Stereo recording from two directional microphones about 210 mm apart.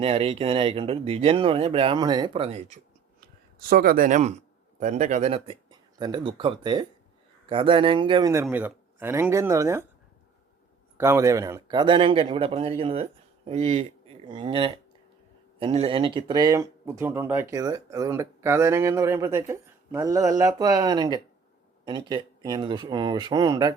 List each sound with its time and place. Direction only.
0.0 s speech: 25° right (ahead or behind)
3.2 s speech: 45° right (ahead or behind); by 9.8 s 15° right (ahead or behind)
10.9 s speech: 10° right (ahead or behind)